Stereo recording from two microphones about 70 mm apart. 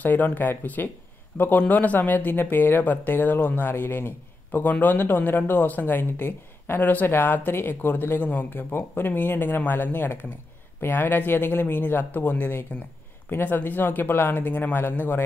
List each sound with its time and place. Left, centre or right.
0.0 s speech: left